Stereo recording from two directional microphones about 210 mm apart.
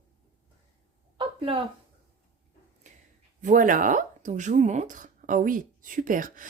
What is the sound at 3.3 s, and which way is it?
Speech, 40° right (ahead or behind).